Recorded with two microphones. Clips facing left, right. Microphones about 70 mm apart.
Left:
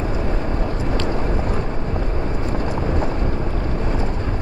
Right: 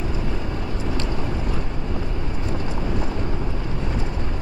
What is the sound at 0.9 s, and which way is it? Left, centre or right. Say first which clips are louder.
Vehicle: left 3 dB; left.